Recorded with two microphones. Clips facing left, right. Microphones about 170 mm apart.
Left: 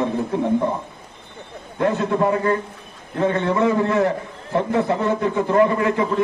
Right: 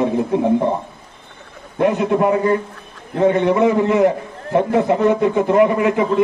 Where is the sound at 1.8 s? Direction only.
15° right (ahead or behind).